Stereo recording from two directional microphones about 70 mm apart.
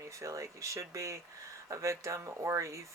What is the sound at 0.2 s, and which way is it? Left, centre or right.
Speech, right.